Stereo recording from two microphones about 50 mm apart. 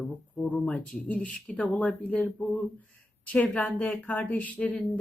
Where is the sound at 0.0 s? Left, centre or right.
Left.